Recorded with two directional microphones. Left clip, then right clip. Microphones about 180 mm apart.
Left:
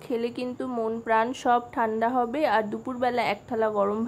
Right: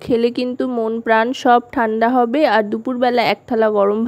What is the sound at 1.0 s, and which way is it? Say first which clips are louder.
A woman's voice: right 9 dB; 45° right (ahead or behind).